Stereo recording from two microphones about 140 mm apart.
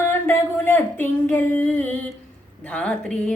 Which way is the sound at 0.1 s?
15° left (ahead or behind).